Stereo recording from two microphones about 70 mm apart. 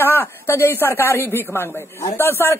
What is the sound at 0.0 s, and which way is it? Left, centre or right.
A woman's voice, left.